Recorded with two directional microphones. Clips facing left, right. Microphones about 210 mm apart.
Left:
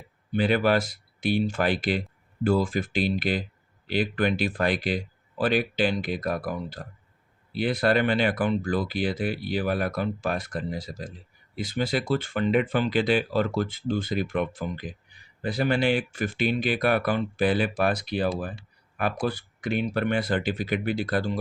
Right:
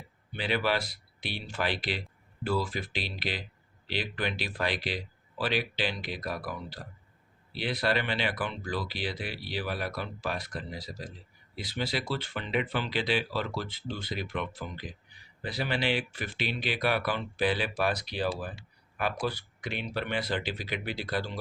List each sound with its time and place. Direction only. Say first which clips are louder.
0.3 s speech: left 7 dB; 45° left (ahead or behind)